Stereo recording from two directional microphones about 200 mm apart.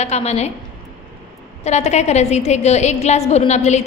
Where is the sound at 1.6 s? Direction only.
35° left (ahead or behind).